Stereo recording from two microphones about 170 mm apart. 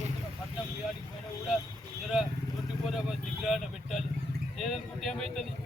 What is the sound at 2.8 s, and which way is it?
Speech, centre (ahead or behind).